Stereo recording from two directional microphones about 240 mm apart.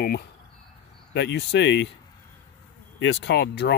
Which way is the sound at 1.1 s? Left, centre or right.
Left.